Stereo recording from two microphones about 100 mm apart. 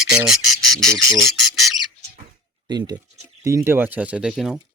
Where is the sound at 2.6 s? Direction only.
45° right (ahead or behind).